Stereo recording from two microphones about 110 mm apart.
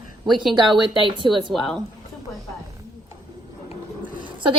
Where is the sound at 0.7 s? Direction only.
50° right (ahead or behind).